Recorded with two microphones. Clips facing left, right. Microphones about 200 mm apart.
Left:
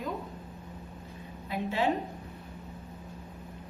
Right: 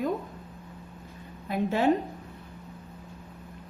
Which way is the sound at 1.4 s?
50° right (ahead or behind).